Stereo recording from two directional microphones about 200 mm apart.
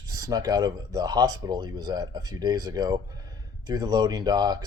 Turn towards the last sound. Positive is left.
turn(degrees=-20)  # may be behind; listen again after turning